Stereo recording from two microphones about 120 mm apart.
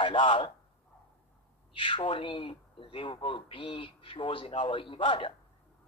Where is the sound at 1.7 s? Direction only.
45° left (ahead or behind).